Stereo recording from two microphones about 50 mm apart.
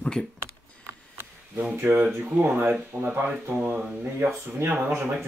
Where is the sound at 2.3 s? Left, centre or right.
Right.